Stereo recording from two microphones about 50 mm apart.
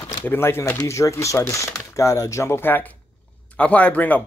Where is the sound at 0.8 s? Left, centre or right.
Left.